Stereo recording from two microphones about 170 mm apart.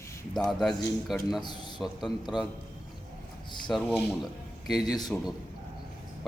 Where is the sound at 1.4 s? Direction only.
25° left (ahead or behind).